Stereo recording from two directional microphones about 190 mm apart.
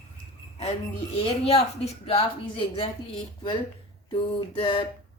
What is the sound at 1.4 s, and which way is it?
Speech, 30° left (ahead or behind).